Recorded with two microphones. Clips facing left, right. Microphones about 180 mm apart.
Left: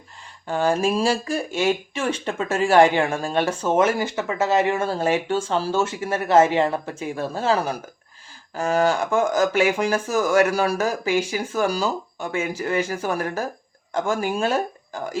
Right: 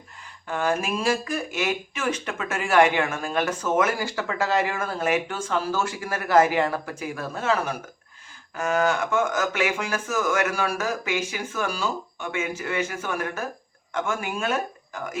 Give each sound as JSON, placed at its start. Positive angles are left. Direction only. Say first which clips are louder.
{"t": 0.4, "sound": "speech", "louder": "left 5 dB", "side_deg": 30}